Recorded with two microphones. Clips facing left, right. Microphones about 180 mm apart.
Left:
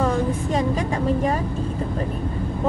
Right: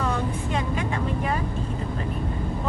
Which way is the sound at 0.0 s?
40° left (ahead or behind).